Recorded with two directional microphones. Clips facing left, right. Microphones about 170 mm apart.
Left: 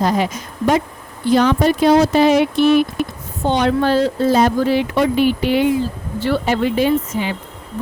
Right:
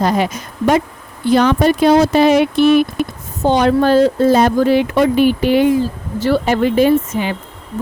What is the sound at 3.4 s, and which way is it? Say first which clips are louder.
Speech: right 4 dB; 40° right (ahead or behind).